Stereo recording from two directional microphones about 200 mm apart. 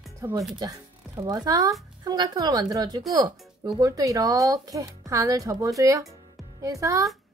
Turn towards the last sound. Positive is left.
turn(degrees=-15)  # may be behind; listen again after turning